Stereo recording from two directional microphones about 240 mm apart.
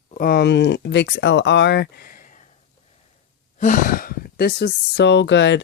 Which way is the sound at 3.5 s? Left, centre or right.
Left.